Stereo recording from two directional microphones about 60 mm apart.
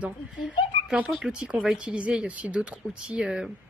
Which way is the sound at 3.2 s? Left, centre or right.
Centre.